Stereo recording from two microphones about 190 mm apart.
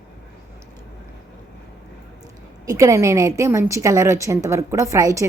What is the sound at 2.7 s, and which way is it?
A woman's voice, 15° right (ahead or behind).